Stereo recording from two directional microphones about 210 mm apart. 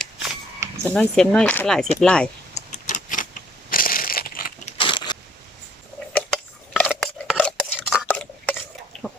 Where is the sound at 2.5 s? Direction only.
35° left (ahead or behind).